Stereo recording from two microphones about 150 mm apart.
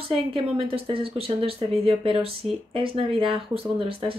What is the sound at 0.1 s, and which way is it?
Speech, 40° right (ahead or behind).